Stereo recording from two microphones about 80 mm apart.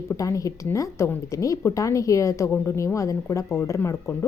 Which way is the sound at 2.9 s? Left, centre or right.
Left.